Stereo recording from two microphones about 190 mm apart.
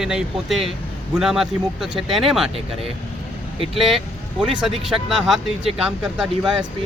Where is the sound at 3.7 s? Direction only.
Centre (ahead or behind).